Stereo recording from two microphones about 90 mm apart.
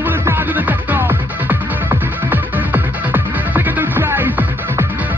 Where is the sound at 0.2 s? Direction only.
25° right (ahead or behind).